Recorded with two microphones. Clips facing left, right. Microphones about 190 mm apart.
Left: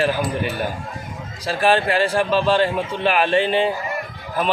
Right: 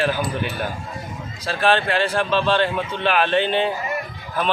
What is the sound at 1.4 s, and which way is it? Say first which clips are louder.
Speech: left 2 dB; 5° left (ahead or behind).